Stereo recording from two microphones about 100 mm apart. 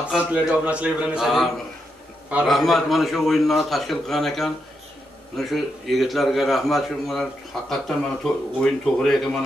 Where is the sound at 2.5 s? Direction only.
Centre (ahead or behind).